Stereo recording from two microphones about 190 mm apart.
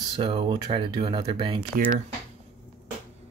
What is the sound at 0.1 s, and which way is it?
Speech, 25° right (ahead or behind).